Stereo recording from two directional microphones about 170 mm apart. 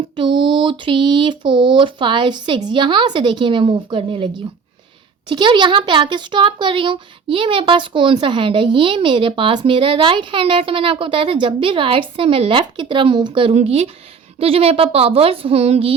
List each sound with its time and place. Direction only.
0.2 s speech: 30° right (ahead or behind)
5.3 s a woman's voice: 25° right (ahead or behind)